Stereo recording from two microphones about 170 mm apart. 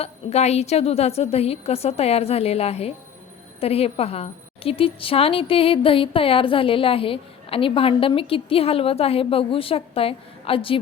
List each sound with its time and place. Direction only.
0.0 s a woman's voice: 40° left (ahead or behind)